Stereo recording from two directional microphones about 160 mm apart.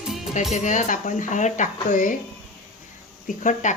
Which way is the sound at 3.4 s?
50° left (ahead or behind).